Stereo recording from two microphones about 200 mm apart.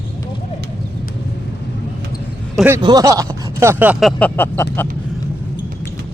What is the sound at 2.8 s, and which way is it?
Speech, 20° right (ahead or behind).